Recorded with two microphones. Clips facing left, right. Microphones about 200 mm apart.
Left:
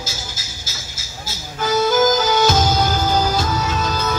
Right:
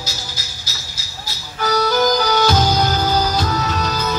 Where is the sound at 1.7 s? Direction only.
20° left (ahead or behind).